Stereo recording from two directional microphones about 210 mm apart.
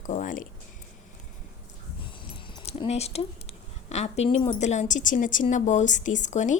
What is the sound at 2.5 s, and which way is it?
Keys jangling, 25° left (ahead or behind).